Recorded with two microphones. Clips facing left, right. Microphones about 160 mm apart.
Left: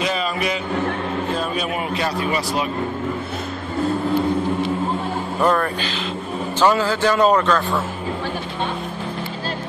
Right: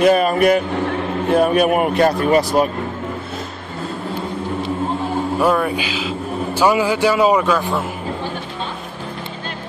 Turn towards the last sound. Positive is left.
turn(degrees=-10)  # may be behind; listen again after turning